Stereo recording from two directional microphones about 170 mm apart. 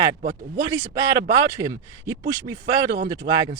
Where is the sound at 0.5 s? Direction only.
20° right (ahead or behind).